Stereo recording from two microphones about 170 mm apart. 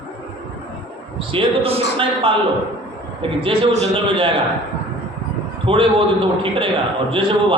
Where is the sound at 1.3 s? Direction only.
35° right (ahead or behind).